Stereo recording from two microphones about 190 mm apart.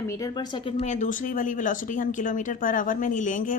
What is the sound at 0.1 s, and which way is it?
Speech, 20° left (ahead or behind).